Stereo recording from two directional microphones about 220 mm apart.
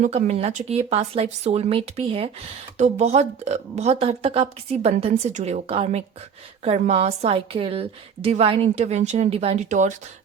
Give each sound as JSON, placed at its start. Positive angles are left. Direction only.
{"t": 0.0, "sound": "a woman's voice", "side_deg": -30}